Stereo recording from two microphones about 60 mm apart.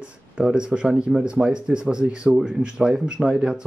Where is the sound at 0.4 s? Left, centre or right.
Centre.